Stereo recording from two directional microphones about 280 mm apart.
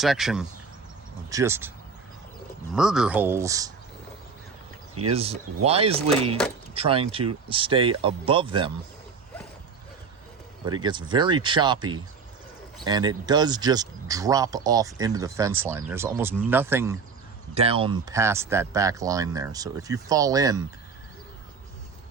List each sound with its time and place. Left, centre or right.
0.0 s speech: centre
2.7 s speech: centre
5.0 s speech: right
10.7 s speech: centre
17.5 s speech: right